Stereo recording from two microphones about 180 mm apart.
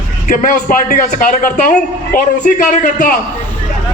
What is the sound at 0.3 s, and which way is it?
A man's voice, 45° left (ahead or behind).